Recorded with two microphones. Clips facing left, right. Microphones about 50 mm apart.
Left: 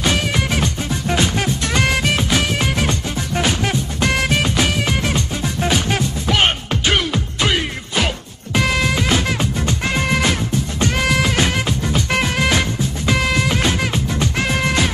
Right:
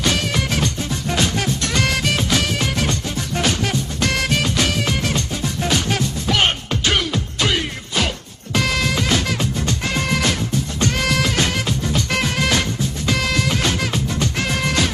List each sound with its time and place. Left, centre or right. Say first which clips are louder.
0.0 s music: left 2 dB; centre